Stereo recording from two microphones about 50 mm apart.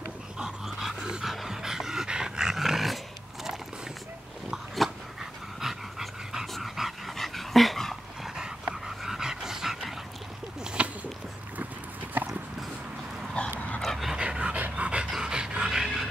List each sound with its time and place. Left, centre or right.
0.4 s dog: centre
5.2 s dog: centre
8.4 s dog: centre
10.6 s a sound: centre
12.2 s a sound: right
13.8 s dog: centre
14.2 s pant: right
14.6 s dog: right
15.0 s dog: centre